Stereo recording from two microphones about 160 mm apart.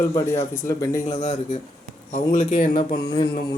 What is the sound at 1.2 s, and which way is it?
Speech, 45° left (ahead or behind).